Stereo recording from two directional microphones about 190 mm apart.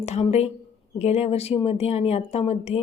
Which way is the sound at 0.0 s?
35° left (ahead or behind).